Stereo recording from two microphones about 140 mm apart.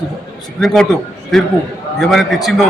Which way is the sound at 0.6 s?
5° left (ahead or behind).